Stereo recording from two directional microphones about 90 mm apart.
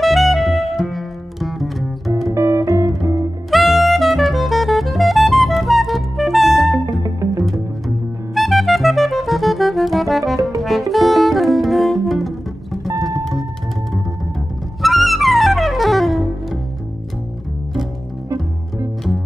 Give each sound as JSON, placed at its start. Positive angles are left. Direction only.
{"t": 0.0, "sound": "music", "side_deg": 0}
{"t": 2.3, "sound": "music", "side_deg": -35}
{"t": 3.4, "sound": "saxophone", "side_deg": 0}
{"t": 6.9, "sound": "music", "side_deg": -40}
{"t": 8.4, "sound": "music", "side_deg": 0}
{"t": 14.8, "sound": "music", "side_deg": 0}